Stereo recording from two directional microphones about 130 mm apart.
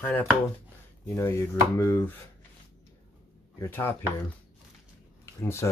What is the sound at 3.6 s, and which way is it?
Speech, 15° left (ahead or behind).